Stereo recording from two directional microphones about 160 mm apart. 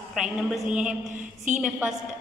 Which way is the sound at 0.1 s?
5° right (ahead or behind).